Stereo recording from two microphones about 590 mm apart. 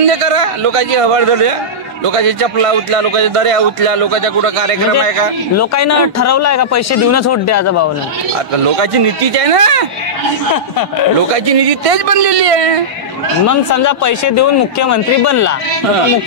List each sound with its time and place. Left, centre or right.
0.0 s speech: right
5.6 s speech: left
8.6 s speech: right
11.3 s speech: right
13.5 s speech: left